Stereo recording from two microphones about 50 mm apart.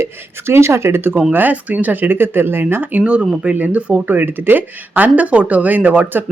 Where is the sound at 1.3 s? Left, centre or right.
Right.